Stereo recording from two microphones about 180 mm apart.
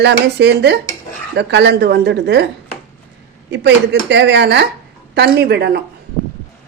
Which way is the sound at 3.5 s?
75° right (ahead or behind).